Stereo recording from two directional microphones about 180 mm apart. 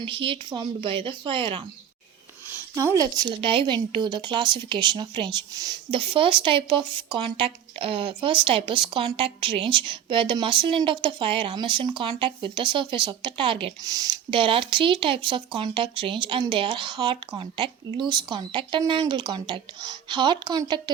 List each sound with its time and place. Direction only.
0.0 s speech: 30° right (ahead or behind)
2.7 s speech: 20° right (ahead or behind)